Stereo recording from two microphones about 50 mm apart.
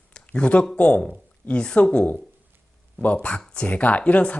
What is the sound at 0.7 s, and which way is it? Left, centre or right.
Speech, left.